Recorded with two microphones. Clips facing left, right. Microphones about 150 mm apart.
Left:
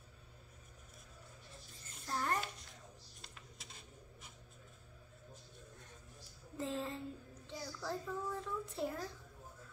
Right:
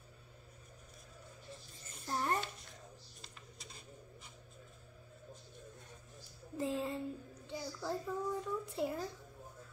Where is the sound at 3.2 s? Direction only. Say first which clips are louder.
Right 1 dB; centre (ahead or behind).